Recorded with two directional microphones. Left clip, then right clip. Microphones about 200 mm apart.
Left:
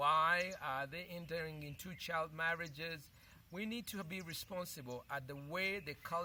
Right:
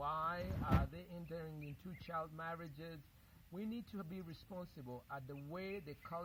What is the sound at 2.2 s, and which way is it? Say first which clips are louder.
Speech: left 7 dB; 10° left (ahead or behind).